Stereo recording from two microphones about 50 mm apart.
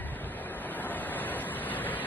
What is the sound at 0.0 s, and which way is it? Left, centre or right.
Waves, left.